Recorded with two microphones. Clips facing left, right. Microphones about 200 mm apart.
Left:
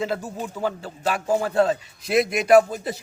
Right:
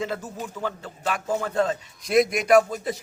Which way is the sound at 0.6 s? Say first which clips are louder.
Left 5 dB; 35° left (ahead or behind).